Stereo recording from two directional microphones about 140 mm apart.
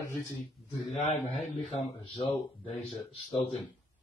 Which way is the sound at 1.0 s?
55° left (ahead or behind).